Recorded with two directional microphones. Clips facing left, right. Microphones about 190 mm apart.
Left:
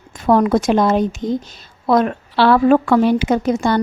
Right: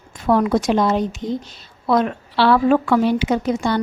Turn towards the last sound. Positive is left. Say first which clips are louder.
# left 3 dB
turn(degrees=45)  # may be behind; listen again after turning